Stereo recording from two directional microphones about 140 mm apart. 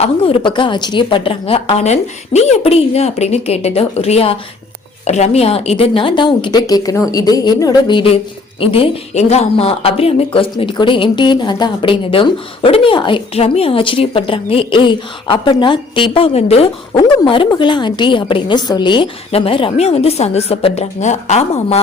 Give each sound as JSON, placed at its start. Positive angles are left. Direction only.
{"t": 0.0, "sound": "a woman's voice", "side_deg": 40}